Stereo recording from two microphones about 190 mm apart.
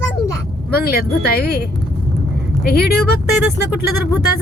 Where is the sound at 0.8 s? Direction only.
55° left (ahead or behind).